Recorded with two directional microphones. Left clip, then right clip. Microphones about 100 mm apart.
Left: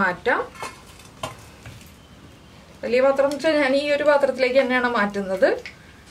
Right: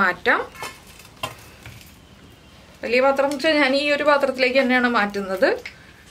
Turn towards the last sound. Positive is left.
turn(degrees=-20)  # may be behind; listen again after turning